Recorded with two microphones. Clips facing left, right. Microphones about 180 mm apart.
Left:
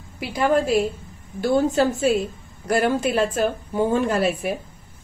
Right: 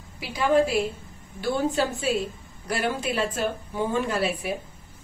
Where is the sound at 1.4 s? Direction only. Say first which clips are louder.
Left 6 dB; 45° left (ahead or behind).